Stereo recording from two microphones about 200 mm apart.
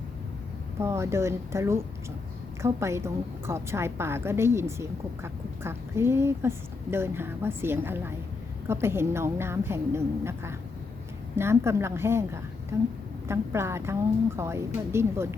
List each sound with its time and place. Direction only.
0.8 s a woman's voice: 15° right (ahead or behind)